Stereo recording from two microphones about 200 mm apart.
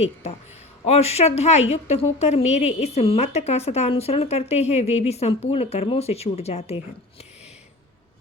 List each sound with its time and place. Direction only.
0.0 s speech: 30° left (ahead or behind)